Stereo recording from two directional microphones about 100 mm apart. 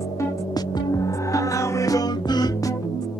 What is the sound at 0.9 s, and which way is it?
Music, 35° left (ahead or behind).